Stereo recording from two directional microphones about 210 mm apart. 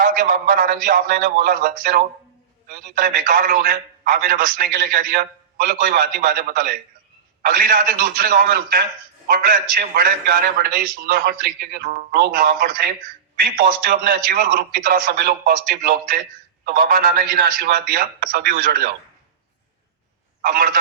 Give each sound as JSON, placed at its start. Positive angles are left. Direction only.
{"t": 0.0, "sound": "a man's voice", "side_deg": -45}
{"t": 20.4, "sound": "a man's voice", "side_deg": -45}